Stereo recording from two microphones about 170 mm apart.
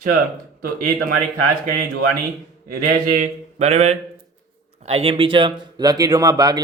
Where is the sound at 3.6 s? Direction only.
40° right (ahead or behind); by 6.6 s 20° right (ahead or behind).